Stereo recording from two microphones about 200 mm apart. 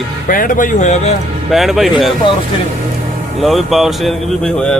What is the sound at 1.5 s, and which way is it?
Speech, centre (ahead or behind).